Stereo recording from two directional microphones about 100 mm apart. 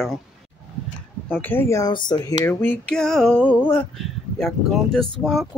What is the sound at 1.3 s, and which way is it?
Speech, 20° left (ahead or behind).